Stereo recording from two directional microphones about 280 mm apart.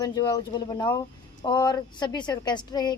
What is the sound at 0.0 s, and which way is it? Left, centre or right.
A woman's voice, centre.